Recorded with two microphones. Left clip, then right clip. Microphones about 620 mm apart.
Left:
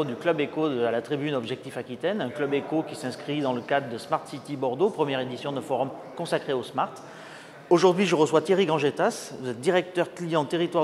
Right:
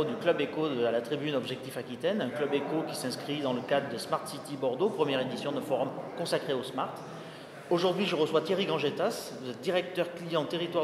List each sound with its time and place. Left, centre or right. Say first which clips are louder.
0.0 s a man's voice: left 3 dB; left